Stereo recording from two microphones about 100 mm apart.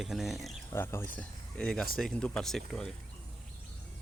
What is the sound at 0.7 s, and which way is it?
Speech, 25° left (ahead or behind).